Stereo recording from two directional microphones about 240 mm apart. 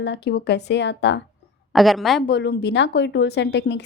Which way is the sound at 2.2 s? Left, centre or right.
Left.